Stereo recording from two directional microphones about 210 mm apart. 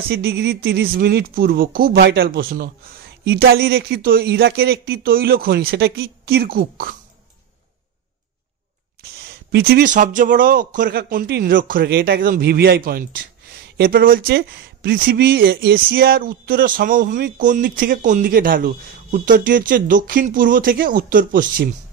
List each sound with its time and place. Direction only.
0.1 s speech: 50° right (ahead or behind)
9.0 s a sound: 45° right (ahead or behind)
9.3 s speech: 50° right (ahead or behind)